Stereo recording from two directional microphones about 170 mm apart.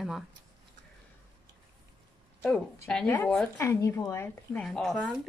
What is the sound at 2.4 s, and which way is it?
A woman's voice, 10° left (ahead or behind).